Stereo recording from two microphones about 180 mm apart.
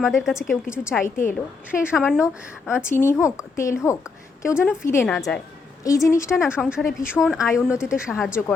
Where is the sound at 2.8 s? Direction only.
15° left (ahead or behind).